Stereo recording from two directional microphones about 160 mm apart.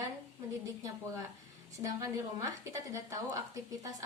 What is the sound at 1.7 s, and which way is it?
A woman's voice, 20° right (ahead or behind).